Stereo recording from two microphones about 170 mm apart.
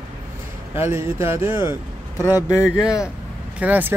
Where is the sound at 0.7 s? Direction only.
15° right (ahead or behind).